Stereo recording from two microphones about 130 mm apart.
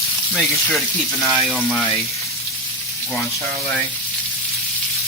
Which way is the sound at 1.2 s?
5° right (ahead or behind).